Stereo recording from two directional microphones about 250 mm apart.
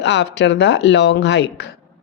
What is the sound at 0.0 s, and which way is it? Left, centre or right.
A woman's voice, left.